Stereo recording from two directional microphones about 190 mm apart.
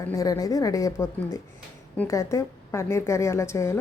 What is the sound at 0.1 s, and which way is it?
A woman's voice, 20° left (ahead or behind).